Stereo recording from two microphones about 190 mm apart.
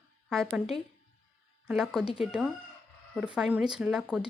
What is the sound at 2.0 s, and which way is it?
Speech, 30° left (ahead or behind).